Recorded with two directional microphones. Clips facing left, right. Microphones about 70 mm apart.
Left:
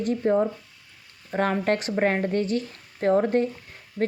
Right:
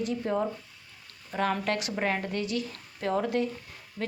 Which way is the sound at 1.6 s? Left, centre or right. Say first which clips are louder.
Left 6 dB; left.